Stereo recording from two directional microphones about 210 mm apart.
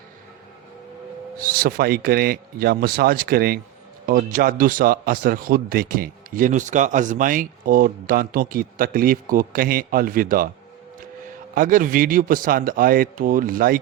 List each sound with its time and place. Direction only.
1.4 s a man's voice: 45° right (ahead or behind)
11.5 s a man's voice: 40° right (ahead or behind)